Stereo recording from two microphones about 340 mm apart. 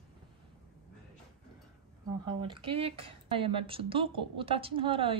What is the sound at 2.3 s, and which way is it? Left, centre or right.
Speech, centre.